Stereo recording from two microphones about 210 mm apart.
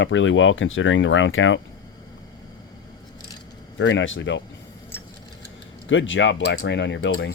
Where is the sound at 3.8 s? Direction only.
60° left (ahead or behind).